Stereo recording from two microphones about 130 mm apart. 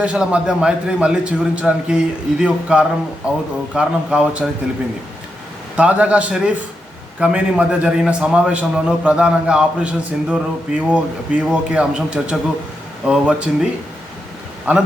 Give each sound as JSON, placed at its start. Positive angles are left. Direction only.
{"t": 0.0, "sound": "a man's voice", "side_deg": -10}
{"t": 5.7, "sound": "a man's voice", "side_deg": -10}
{"t": 14.7, "sound": "a man's voice", "side_deg": -10}